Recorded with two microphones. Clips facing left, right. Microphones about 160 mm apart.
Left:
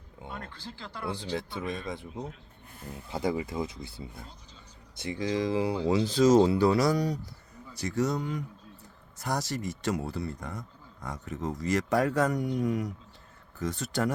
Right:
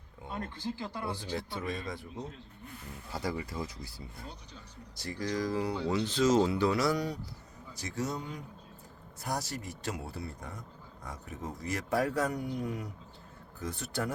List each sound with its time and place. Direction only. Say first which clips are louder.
0.3 s speech: right 8 dB; 20° right (ahead or behind)
1.2 s speech: left 3 dB; 20° left (ahead or behind)
5.2 s speech: left 4 dB; 25° left (ahead or behind); by 7.2 s 40° left (ahead or behind)
7.8 s a man's voice: left 7 dB; 70° left (ahead or behind)